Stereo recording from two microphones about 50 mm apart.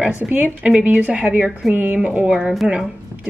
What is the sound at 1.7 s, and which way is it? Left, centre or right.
Speech, right.